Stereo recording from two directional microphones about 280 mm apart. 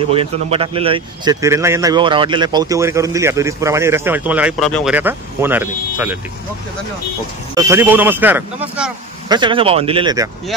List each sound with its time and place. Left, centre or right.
0.1 s speech: centre
7.5 s speech: centre
9.3 s speech: centre